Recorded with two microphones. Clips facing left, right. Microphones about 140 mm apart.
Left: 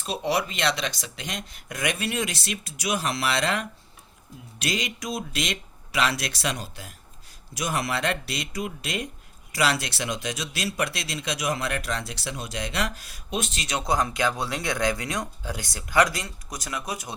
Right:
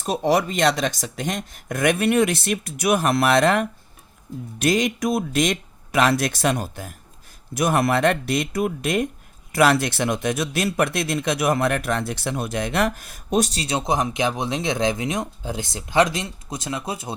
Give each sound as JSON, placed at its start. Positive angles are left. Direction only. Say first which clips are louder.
{"t": 0.0, "sound": "speech", "louder": "right 6 dB", "side_deg": -45}